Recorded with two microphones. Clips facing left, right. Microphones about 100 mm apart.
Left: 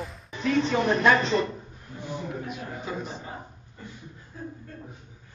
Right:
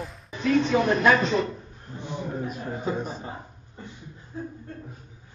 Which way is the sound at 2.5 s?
40° right (ahead or behind).